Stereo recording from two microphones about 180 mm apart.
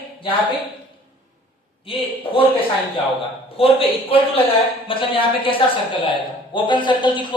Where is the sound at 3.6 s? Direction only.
30° left (ahead or behind).